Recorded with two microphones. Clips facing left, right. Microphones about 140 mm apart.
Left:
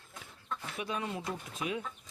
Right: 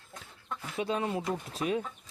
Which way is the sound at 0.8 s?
30° right (ahead or behind).